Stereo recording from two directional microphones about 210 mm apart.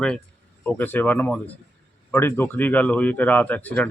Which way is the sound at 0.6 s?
10° left (ahead or behind).